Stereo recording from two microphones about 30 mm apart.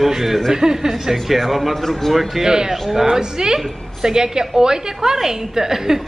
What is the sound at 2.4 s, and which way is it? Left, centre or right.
A woman's voice, right.